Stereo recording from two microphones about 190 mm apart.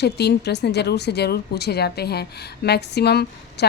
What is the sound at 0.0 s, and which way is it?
A woman's voice, 60° left (ahead or behind).